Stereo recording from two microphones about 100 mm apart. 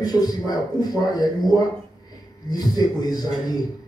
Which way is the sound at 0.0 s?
40° left (ahead or behind).